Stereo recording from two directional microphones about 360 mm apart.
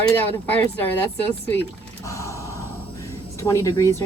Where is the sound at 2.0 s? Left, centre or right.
Centre.